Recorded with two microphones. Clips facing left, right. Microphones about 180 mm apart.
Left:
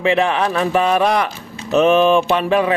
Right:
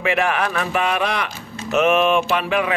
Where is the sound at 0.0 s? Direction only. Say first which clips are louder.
Left 4 dB; 30° left (ahead or behind).